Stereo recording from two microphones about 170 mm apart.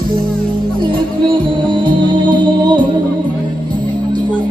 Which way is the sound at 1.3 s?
30° right (ahead or behind).